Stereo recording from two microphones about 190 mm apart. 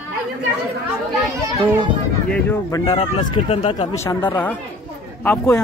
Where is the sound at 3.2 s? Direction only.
35° left (ahead or behind).